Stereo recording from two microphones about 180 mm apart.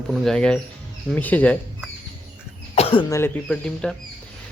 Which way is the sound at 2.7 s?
35° left (ahead or behind).